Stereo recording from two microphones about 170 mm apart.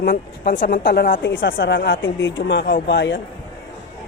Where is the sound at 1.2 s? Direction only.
90° left.